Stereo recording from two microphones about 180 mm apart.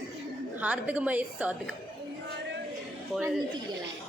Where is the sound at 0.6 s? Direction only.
5° right (ahead or behind).